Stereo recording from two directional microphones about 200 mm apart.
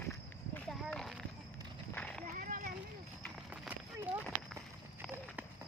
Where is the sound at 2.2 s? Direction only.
40° right (ahead or behind).